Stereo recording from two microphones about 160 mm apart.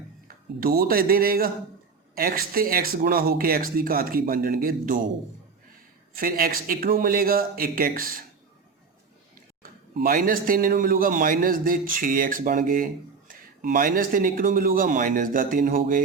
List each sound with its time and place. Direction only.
0.6 s speech: 70° right (ahead or behind)
6.1 s speech: 65° right (ahead or behind)
9.6 s speech: 65° right (ahead or behind)